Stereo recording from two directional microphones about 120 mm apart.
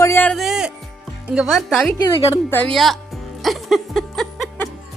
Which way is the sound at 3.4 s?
Centre (ahead or behind).